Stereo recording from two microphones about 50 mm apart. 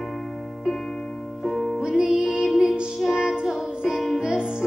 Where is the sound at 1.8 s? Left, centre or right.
Centre.